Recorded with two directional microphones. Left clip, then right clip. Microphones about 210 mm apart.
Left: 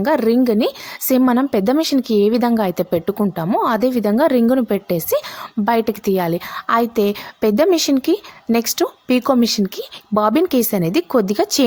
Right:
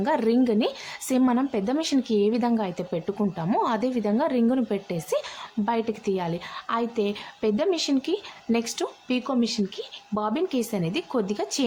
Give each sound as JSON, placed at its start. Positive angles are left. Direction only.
{"t": 0.0, "sound": "a woman's voice", "side_deg": 30}